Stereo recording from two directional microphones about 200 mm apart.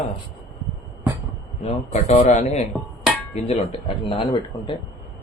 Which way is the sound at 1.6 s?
30° left (ahead or behind).